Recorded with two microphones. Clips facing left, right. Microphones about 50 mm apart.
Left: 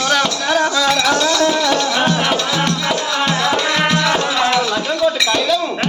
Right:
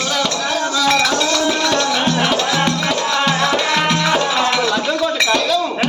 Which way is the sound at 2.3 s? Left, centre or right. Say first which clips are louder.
Right 1 dB; centre.